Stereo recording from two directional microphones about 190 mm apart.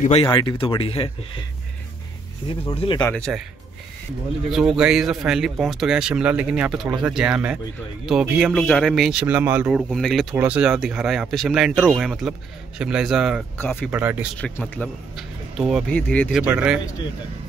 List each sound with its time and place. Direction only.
0.0 s speech: 30° left (ahead or behind)
2.7 s speech: 30° left (ahead or behind)
3.0 s speech: 5° left (ahead or behind)
4.5 s speech: 5° right (ahead or behind)
13.6 s speech: 10° left (ahead or behind)
13.8 s speech: 10° right (ahead or behind)
14.4 s speech: 5° left (ahead or behind)
15.9 s speech: 10° left (ahead or behind)
16.3 s speech: 5° right (ahead or behind)